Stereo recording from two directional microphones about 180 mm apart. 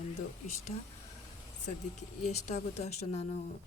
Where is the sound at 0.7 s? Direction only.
35° left (ahead or behind).